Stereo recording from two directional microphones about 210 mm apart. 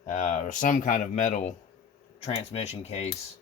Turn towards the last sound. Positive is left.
turn(degrees=30)  # may be behind; listen again after turning